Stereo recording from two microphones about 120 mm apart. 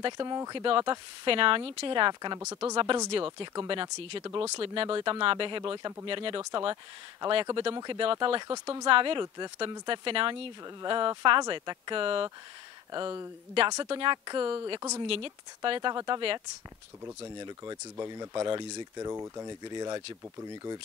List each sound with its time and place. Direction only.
0.0 s speech: 35° right (ahead or behind)
2.4 s speech: 25° right (ahead or behind)
3.3 s speech: 40° right (ahead or behind)
5.2 s a woman's voice: 45° right (ahead or behind)
8.8 s a woman's voice: 45° right (ahead or behind)
12.9 s speech: 35° right (ahead or behind)
15.0 s a woman's voice: 50° right (ahead or behind)
17.4 s speech: 35° right (ahead or behind)